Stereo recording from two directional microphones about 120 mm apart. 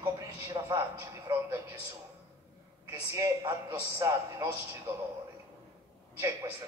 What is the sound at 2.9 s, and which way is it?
Speech, 30° right (ahead or behind).